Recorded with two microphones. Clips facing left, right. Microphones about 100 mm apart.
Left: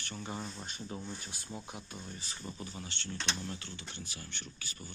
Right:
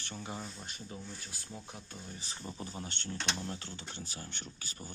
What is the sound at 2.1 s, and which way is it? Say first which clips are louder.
Speech: even; 20° right (ahead or behind).